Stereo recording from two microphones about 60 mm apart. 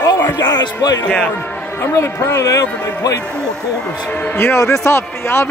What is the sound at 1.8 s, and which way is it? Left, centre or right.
Speech, left.